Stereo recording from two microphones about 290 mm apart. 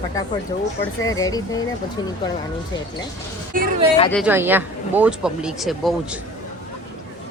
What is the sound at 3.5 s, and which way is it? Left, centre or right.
Speech, right.